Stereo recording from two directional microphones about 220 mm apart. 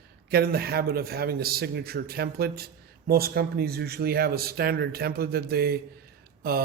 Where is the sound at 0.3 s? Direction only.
45° right (ahead or behind).